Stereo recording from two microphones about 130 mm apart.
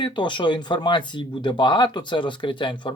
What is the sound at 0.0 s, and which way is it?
Speech, 35° left (ahead or behind).